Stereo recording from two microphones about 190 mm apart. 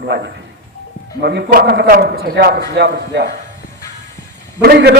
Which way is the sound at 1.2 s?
60° right (ahead or behind).